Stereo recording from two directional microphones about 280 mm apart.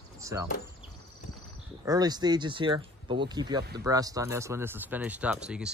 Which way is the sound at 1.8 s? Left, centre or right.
Centre.